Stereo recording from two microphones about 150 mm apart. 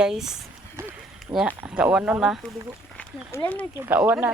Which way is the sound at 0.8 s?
20° right (ahead or behind).